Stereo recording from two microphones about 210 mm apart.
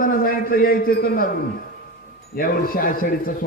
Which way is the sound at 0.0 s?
40° left (ahead or behind).